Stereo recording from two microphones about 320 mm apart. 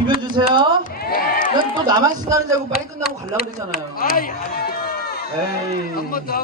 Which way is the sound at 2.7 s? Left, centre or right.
Left.